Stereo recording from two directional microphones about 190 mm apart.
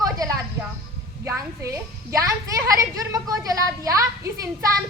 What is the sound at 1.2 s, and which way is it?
Speech, 15° right (ahead or behind).